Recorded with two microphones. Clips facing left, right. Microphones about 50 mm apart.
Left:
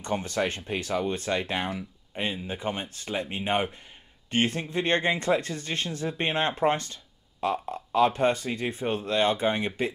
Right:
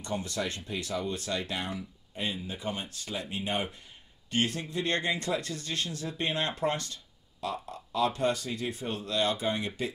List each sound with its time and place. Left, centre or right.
0.0 s speech: left